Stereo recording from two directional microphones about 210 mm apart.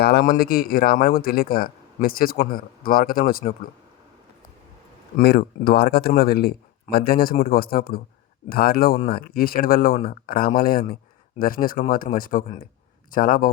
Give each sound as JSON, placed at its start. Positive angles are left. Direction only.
{"t": 0.0, "sound": "speech", "side_deg": 45}
{"t": 5.1, "sound": "speech", "side_deg": 50}